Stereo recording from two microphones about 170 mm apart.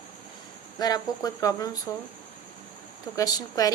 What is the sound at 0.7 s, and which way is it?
A woman's voice, 20° left (ahead or behind).